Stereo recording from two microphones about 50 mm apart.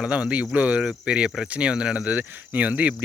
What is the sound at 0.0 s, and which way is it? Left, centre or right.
Cricket, right.